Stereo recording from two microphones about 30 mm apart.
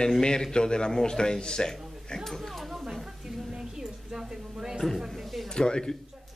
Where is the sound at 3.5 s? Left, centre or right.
Right.